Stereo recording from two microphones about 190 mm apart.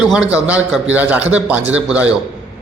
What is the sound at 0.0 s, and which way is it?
A man's voice, 5° right (ahead or behind).